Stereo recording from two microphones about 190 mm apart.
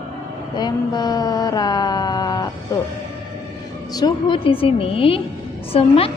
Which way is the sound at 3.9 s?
20° left (ahead or behind).